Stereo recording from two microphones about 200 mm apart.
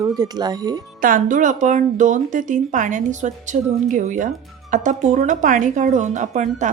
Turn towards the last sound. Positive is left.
turn(degrees=-40)  # may be behind; listen again after turning